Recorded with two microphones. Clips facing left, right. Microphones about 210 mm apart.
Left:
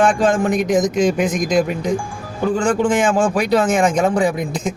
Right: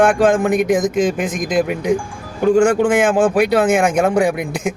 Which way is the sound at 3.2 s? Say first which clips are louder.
Right 4 dB; 60° right (ahead or behind).